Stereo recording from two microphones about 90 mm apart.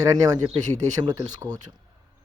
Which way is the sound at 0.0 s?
45° right (ahead or behind).